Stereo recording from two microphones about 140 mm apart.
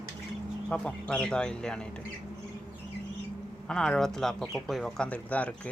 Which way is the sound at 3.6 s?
5° left (ahead or behind).